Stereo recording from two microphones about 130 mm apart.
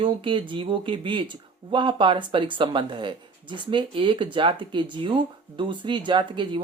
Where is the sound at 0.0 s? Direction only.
40° right (ahead or behind).